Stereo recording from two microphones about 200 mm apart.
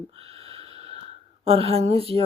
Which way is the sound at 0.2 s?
30° right (ahead or behind).